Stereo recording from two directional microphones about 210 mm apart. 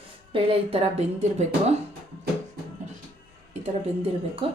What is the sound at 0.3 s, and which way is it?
Speech, 25° right (ahead or behind).